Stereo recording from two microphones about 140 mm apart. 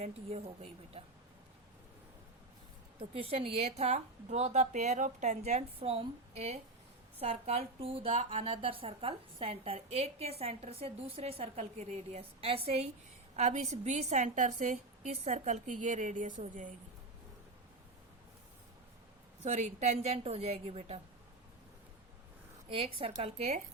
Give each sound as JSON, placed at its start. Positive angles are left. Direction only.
{"t": 0.0, "sound": "a woman's voice", "side_deg": -45}
{"t": 3.0, "sound": "a woman's voice", "side_deg": -45}
{"t": 19.4, "sound": "a woman's voice", "side_deg": -55}
{"t": 22.7, "sound": "a woman's voice", "side_deg": -45}